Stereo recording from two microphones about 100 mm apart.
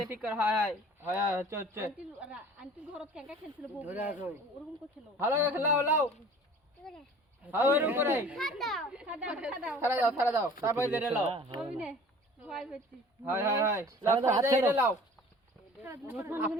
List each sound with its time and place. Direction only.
0.1 s a man's voice: 15° right (ahead or behind)
2.2 s a man's voice: 10° right (ahead or behind)
7.4 s a man's voice: 20° right (ahead or behind)
8.4 s a child's voice: centre (ahead or behind)
8.9 s speech: 10° right (ahead or behind)
9.8 s a man's voice: 25° right (ahead or behind)
11.3 s speech: 70° right (ahead or behind)
11.6 s speech: 10° right (ahead or behind)
13.2 s a man's voice: 30° right (ahead or behind)